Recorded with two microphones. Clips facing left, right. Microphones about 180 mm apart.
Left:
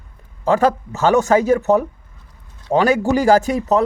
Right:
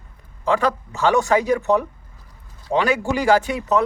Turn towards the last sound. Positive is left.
turn(degrees=40)  # may be behind; listen again after turning